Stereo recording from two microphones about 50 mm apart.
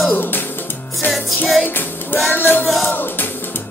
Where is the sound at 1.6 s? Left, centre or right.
Left.